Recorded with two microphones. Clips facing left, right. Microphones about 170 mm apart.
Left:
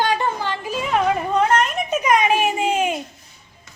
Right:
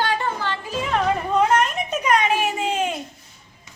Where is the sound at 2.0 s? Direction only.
10° left (ahead or behind).